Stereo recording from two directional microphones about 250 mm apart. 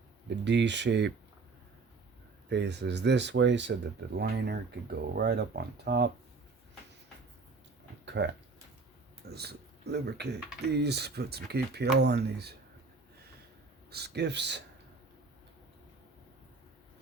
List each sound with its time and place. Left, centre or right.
0.4 s speech: right
2.5 s speech: right
8.0 s a sound: right
9.3 s a man's voice: right
13.9 s speech: right